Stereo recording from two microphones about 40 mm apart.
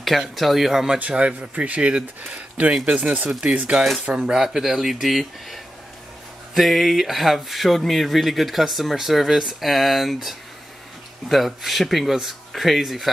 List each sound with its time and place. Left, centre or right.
0.4 s speech: centre
1.1 s speech: right
3.3 s speech: centre
3.7 s speech: centre
4.0 s speech: right; by 13.1 s centre